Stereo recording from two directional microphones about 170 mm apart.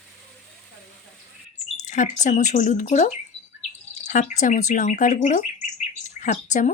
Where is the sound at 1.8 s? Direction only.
45° left (ahead or behind).